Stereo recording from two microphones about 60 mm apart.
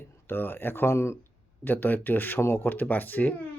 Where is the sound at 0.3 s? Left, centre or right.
Left.